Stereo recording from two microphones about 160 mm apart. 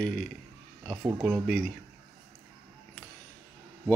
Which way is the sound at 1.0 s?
30° right (ahead or behind).